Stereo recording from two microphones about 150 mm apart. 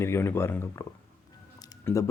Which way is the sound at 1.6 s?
25° left (ahead or behind).